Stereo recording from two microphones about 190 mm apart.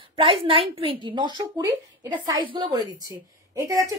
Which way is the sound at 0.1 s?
25° right (ahead or behind).